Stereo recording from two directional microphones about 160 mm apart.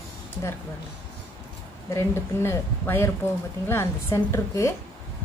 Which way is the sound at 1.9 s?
15° left (ahead or behind).